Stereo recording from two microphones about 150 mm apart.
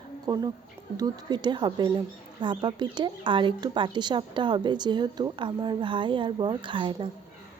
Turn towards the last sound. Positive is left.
turn(degrees=-30)  # may be behind; listen again after turning